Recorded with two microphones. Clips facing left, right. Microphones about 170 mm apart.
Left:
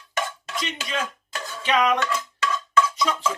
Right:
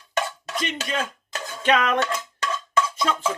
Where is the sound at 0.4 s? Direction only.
50° right (ahead or behind).